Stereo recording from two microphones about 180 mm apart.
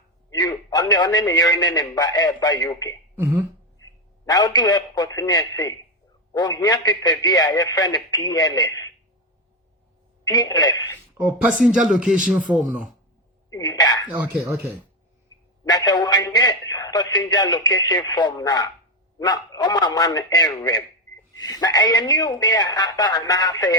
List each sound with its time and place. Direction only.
0.3 s a man's voice: 20° left (ahead or behind)
3.2 s speech: 10° right (ahead or behind)
4.3 s a man's voice: 20° left (ahead or behind)
10.2 s a man's voice: 25° left (ahead or behind)
11.6 s a man's voice: centre (ahead or behind)
13.5 s a man's voice: 20° left (ahead or behind)
14.1 s speech: 10° right (ahead or behind)
15.6 s a man's voice: 20° left (ahead or behind)